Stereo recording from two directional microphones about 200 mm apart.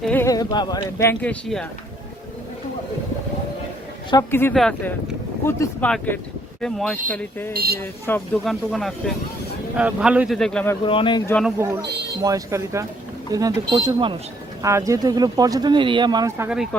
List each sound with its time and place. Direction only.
0.0 s speech: 10° left (ahead or behind)
4.1 s speech: 15° left (ahead or behind)
7.5 s speech: 50° right (ahead or behind)
7.8 s speech: 10° left (ahead or behind)
10.8 s speech: 25° left (ahead or behind)
11.6 s speech: 15° right (ahead or behind)